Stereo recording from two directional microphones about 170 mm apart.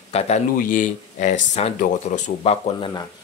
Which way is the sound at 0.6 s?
50° left (ahead or behind).